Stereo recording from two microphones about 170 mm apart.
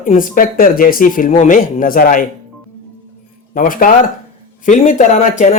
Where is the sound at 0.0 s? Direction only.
50° left (ahead or behind).